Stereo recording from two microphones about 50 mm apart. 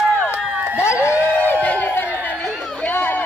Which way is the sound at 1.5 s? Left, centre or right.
Left.